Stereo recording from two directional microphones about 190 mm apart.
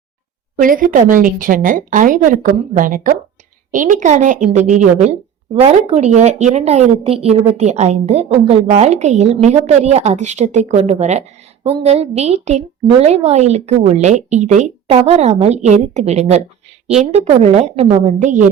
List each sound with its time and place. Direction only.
0.6 s a woman's voice: 45° right (ahead or behind)